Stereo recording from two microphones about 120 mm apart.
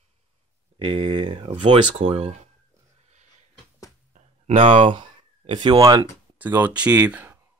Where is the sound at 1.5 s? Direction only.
50° right (ahead or behind).